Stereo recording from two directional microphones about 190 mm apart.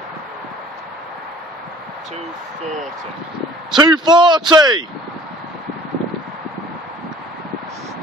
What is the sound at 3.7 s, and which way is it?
Speech, 20° right (ahead or behind).